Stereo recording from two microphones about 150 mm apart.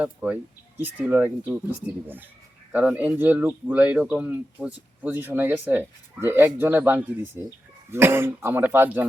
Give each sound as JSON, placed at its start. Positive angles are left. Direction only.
{"t": 0.0, "sound": "speech", "side_deg": -10}
{"t": 2.7, "sound": "speech", "side_deg": -10}